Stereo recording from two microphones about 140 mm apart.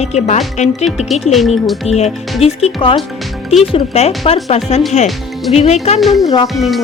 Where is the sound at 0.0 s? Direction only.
50° left (ahead or behind).